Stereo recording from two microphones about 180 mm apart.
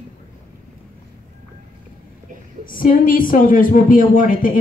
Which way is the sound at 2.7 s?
50° left (ahead or behind).